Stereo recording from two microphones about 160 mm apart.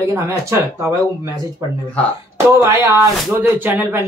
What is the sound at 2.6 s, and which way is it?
Speech, 20° right (ahead or behind).